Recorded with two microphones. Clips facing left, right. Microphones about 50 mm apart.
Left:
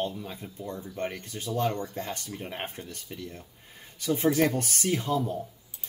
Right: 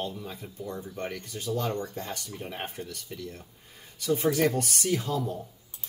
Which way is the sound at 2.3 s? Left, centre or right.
Centre.